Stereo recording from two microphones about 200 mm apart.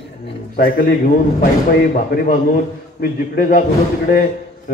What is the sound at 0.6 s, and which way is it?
A man's voice, 50° left (ahead or behind).